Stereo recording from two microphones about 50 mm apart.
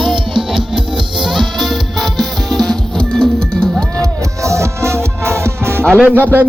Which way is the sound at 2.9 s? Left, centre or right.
Centre.